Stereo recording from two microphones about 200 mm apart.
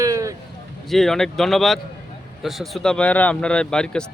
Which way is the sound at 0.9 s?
Centre (ahead or behind).